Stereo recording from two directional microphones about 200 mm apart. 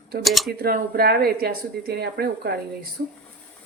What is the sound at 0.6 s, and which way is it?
Speech, 50° right (ahead or behind).